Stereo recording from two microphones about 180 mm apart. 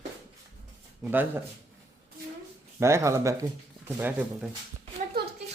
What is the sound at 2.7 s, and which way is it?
Speech, 15° right (ahead or behind).